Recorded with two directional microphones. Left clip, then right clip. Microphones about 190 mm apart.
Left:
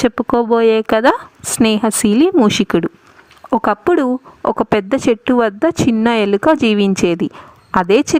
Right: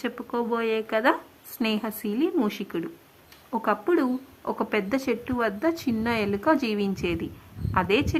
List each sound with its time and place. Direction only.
0.0 s speech: 50° left (ahead or behind)